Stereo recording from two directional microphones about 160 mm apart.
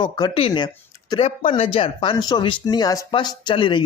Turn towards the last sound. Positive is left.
turn(degrees=30)  # may be behind; listen again after turning